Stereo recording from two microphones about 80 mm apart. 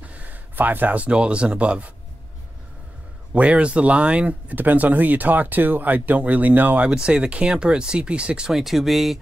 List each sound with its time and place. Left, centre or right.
0.0 s speech: centre
3.3 s speech: centre